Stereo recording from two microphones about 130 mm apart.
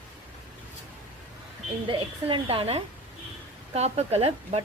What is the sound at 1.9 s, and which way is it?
A woman's voice, 40° right (ahead or behind).